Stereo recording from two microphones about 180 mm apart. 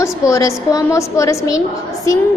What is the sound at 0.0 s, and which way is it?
A woman's voice, 15° left (ahead or behind).